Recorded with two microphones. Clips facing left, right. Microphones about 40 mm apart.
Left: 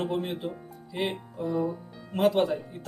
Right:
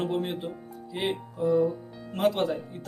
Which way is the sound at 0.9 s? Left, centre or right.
Centre.